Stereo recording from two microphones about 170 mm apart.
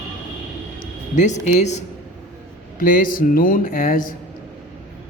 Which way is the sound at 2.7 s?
50° left (ahead or behind).